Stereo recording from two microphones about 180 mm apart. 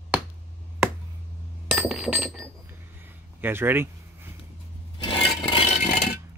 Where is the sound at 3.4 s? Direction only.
10° right (ahead or behind).